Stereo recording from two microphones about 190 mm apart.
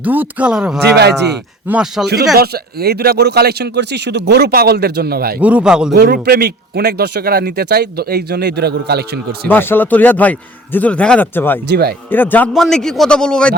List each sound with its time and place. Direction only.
0.0 s speech: 10° right (ahead or behind)
0.9 s speech: 60° right (ahead or behind)
1.6 s a man's voice: 5° right (ahead or behind)
2.3 s speech: 55° right (ahead or behind)
5.4 s a man's voice: 5° right (ahead or behind)
5.9 s speech: 55° right (ahead or behind)
9.5 s a man's voice: 10° left (ahead or behind)
11.7 s speech: 55° right (ahead or behind)
12.1 s a man's voice: 10° left (ahead or behind)